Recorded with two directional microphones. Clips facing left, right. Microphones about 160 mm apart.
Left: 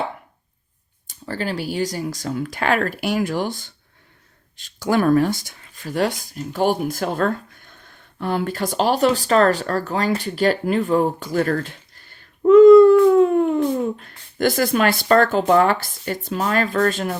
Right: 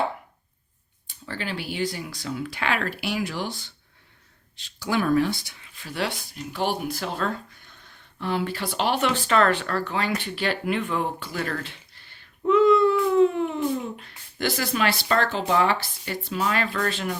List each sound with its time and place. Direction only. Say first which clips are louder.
1.0 s speech: left 7 dB; 40° left (ahead or behind)